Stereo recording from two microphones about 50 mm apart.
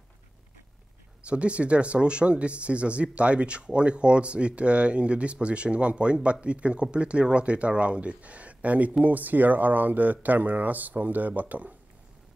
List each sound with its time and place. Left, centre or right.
1.2 s speech: right